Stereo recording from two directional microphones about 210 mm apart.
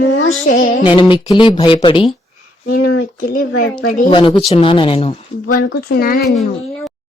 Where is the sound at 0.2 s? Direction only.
65° left (ahead or behind).